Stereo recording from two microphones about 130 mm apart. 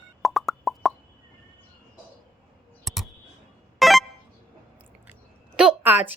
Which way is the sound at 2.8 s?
Centre (ahead or behind).